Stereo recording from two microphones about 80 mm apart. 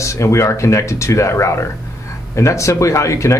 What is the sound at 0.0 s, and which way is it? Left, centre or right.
Speech, left.